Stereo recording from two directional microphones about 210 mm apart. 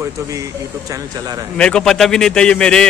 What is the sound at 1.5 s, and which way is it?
A man's voice, 5° left (ahead or behind).